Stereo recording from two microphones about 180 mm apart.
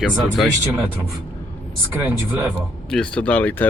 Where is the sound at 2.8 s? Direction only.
5° left (ahead or behind).